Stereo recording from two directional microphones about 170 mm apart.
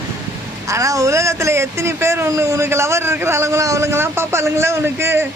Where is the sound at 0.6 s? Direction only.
20° right (ahead or behind).